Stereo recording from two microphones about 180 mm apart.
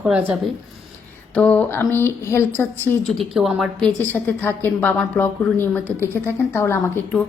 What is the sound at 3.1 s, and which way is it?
A woman's voice, centre (ahead or behind).